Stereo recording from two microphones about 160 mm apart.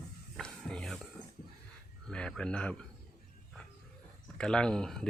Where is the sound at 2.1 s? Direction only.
5° left (ahead or behind).